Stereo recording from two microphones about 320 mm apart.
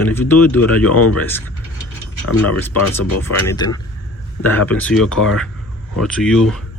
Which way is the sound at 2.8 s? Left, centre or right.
Left.